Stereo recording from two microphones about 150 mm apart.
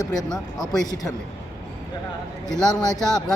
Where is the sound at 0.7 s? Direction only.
25° left (ahead or behind).